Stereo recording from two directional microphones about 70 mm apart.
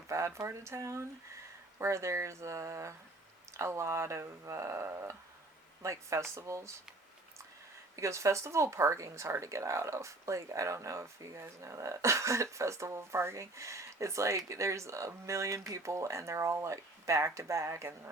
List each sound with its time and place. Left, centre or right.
0.1 s speech: right
7.9 s speech: right